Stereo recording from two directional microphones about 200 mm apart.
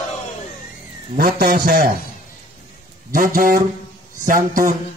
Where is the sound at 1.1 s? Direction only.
45° right (ahead or behind).